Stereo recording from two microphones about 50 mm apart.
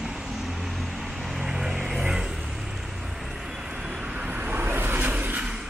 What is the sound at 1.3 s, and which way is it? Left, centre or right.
Vehicle, centre.